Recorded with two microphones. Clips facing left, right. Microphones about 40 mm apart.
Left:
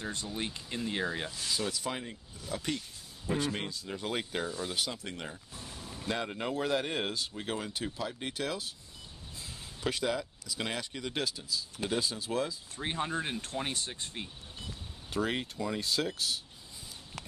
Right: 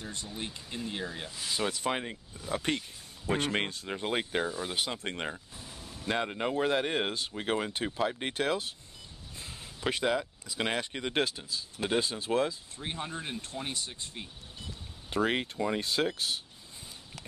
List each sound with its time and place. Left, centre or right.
0.8 s speech: left
1.5 s speech: right
4.0 s speech: right
6.0 s speech: right
9.8 s speech: right
12.8 s speech: left
13.6 s speech: left
15.0 s speech: right